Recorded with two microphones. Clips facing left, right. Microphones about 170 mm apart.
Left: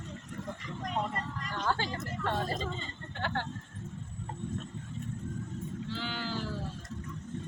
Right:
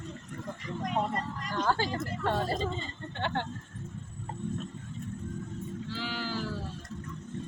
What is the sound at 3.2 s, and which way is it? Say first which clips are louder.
Speech: right 2 dB; 20° right (ahead or behind).